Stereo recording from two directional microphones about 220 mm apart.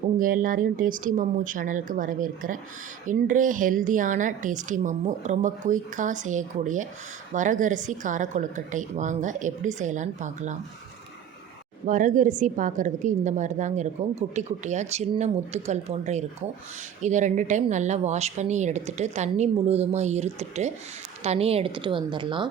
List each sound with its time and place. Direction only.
0.2 s a woman's voice: 40° right (ahead or behind)
11.9 s a woman's voice: 35° right (ahead or behind)